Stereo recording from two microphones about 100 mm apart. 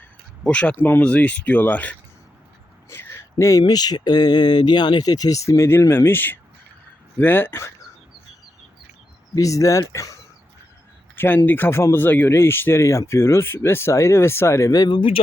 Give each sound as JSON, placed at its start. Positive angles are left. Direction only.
{"t": 0.4, "sound": "speech", "side_deg": 10}
{"t": 2.9, "sound": "a sound", "side_deg": 25}
{"t": 3.7, "sound": "speech", "side_deg": 40}
{"t": 9.3, "sound": "speech", "side_deg": 35}
{"t": 11.2, "sound": "speech", "side_deg": 20}